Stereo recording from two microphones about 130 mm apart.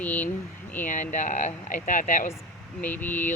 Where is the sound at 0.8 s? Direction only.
80° left.